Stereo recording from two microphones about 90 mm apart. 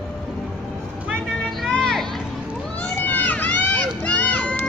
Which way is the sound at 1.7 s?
5° left (ahead or behind).